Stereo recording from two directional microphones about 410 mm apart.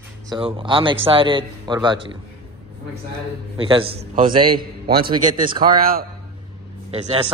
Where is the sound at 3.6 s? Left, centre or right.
Centre.